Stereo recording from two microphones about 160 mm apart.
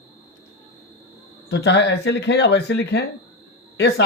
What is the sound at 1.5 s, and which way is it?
Speech, 90° left.